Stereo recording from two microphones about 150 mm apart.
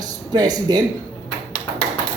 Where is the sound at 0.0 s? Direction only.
25° right (ahead or behind).